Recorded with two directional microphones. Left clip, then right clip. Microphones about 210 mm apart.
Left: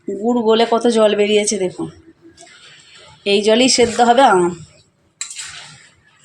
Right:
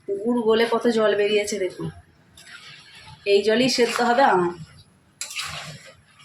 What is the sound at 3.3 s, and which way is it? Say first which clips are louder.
Speech: left 6 dB; 35° left (ahead or behind).